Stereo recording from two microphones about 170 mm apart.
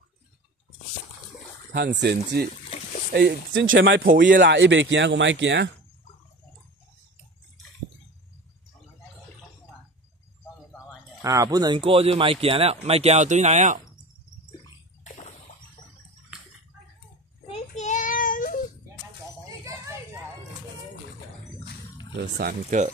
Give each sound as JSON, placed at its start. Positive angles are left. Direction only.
{"t": 2.0, "sound": "speech", "side_deg": -70}
{"t": 4.4, "sound": "speech", "side_deg": -90}
{"t": 11.2, "sound": "speech", "side_deg": -20}
{"t": 15.0, "sound": "splash", "side_deg": 45}
{"t": 17.5, "sound": "child singing", "side_deg": 45}
{"t": 19.6, "sound": "a sound", "side_deg": -15}
{"t": 22.1, "sound": "speech", "side_deg": -65}